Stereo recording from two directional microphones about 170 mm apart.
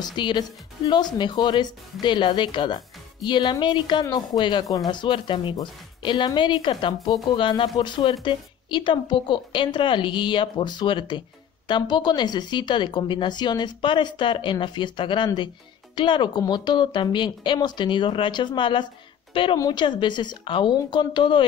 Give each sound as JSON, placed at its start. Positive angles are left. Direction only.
{"t": 0.0, "sound": "a woman's voice", "side_deg": 25}